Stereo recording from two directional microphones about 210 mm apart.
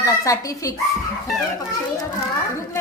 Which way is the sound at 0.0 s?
15° left (ahead or behind).